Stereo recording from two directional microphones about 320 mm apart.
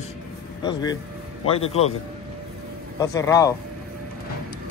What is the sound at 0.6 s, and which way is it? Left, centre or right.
Speech, centre.